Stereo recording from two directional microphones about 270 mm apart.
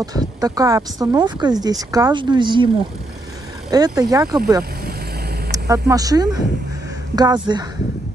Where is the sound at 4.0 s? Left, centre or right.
Centre.